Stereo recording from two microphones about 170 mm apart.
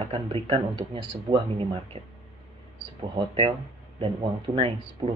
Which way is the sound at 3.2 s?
30° right (ahead or behind).